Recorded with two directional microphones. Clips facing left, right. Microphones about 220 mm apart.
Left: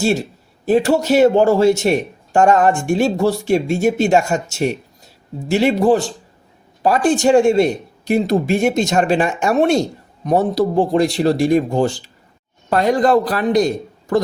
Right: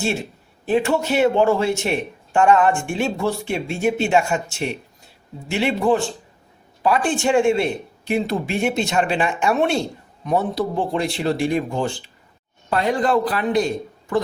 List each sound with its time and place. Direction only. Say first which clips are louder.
0.0 s a man's voice: left 6 dB; 40° left (ahead or behind)